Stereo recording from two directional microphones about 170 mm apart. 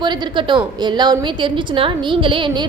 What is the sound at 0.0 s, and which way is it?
A woman's voice, 30° right (ahead or behind).